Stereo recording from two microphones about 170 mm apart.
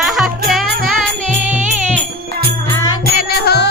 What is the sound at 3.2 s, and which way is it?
Music, 70° left (ahead or behind).